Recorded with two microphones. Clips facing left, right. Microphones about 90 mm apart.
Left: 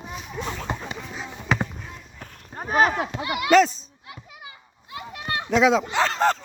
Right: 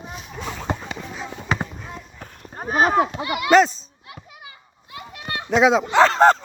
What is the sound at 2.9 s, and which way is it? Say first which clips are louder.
Speech: right 7 dB; 50° right (ahead or behind).